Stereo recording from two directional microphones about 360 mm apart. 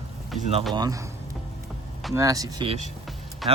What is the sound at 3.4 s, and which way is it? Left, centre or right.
Speech, centre.